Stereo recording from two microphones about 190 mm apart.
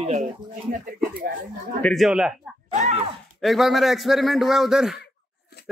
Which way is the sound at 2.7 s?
40° right (ahead or behind).